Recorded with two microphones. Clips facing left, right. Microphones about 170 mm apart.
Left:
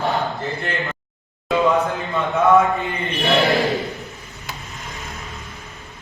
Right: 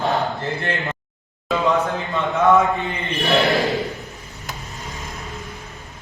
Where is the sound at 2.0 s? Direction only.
Centre (ahead or behind).